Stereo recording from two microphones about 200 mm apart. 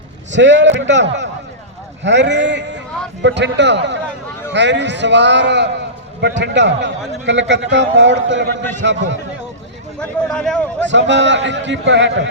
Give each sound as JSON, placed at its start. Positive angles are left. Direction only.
{"t": 0.3, "sound": "a man's voice", "side_deg": -65}
{"t": 10.0, "sound": "speech", "side_deg": 5}
{"t": 10.8, "sound": "a man's voice", "side_deg": -65}